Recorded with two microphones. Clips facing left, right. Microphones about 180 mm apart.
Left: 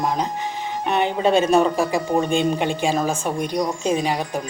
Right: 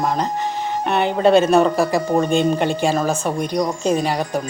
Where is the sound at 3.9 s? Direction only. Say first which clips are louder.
Right 2 dB; 40° right (ahead or behind).